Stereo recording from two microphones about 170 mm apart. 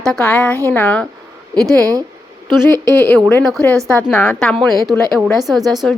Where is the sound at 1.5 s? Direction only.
20° right (ahead or behind).